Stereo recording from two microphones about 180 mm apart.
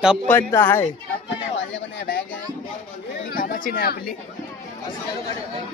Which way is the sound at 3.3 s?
55° left (ahead or behind).